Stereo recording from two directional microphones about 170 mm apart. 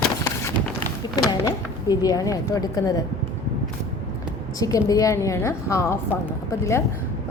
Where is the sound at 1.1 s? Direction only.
20° left (ahead or behind).